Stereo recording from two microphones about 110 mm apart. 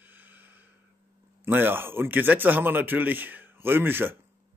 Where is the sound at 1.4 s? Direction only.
20° right (ahead or behind).